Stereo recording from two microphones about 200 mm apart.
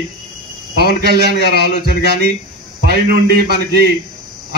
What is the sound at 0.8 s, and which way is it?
Speech, 50° right (ahead or behind).